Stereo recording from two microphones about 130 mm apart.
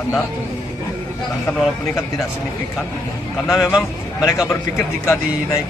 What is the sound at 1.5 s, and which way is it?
Speech, 15° left (ahead or behind).